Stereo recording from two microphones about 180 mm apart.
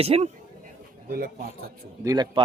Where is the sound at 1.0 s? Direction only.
55° right (ahead or behind).